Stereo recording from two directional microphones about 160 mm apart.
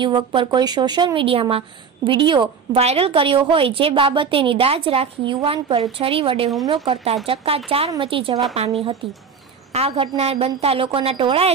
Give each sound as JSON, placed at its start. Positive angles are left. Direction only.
{"t": 0.0, "sound": "a woman's voice", "side_deg": -30}